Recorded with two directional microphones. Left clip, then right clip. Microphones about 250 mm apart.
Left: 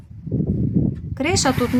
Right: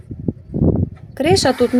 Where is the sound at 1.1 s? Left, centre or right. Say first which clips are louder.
Right 5 dB; centre.